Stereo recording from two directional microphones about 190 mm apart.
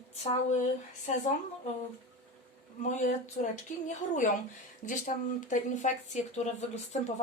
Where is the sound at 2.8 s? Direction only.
40° left (ahead or behind).